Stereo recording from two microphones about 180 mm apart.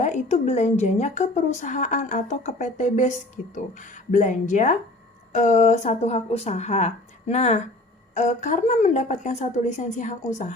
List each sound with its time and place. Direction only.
0.0 s a woman's voice: 40° left (ahead or behind)